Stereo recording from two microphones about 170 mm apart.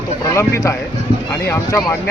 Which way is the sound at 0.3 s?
15° left (ahead or behind).